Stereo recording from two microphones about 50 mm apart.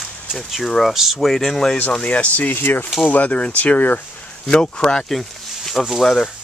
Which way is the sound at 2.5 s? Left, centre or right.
Left.